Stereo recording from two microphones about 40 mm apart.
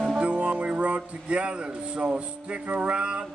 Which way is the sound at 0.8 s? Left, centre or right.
Right.